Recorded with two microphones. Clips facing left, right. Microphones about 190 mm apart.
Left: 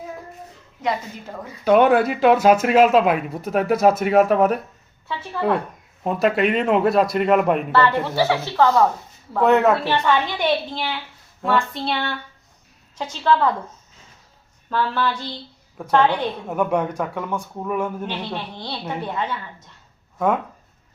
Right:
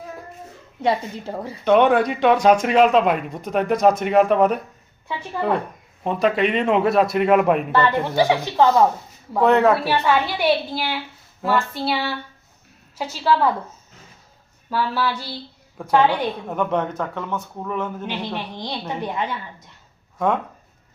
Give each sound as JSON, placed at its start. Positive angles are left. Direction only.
{"t": 0.8, "sound": "a woman's voice", "side_deg": -30}
{"t": 1.6, "sound": "speech", "side_deg": 5}
{"t": 7.7, "sound": "a woman's voice", "side_deg": -15}
{"t": 9.4, "sound": "speech", "side_deg": 0}
{"t": 9.7, "sound": "a woman's voice", "side_deg": -10}
{"t": 14.7, "sound": "a woman's voice", "side_deg": -10}
{"t": 16.5, "sound": "a man's voice", "side_deg": 10}
{"t": 18.0, "sound": "a woman's voice", "side_deg": -10}
{"t": 20.1, "sound": "speech", "side_deg": 5}